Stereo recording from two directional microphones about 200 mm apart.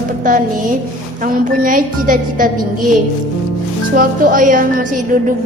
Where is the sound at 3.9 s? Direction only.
45° right (ahead or behind).